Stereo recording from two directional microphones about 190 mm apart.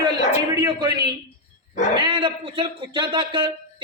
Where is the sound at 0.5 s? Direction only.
20° right (ahead or behind).